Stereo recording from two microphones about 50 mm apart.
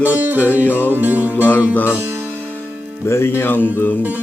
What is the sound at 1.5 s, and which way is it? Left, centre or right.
Speech, left.